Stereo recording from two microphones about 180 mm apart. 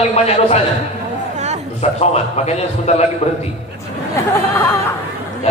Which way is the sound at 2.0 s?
35° left (ahead or behind).